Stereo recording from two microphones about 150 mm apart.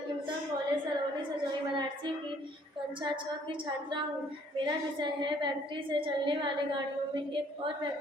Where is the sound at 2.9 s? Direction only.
35° right (ahead or behind).